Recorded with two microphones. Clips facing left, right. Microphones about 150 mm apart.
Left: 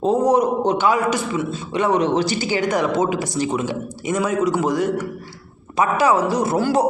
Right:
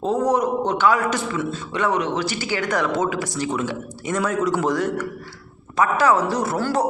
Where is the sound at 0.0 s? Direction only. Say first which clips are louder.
Left 3 dB; 20° left (ahead or behind).